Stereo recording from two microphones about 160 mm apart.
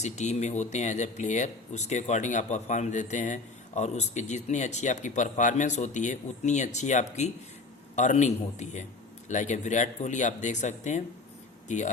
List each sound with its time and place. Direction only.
0.0 s speech: 45° left (ahead or behind)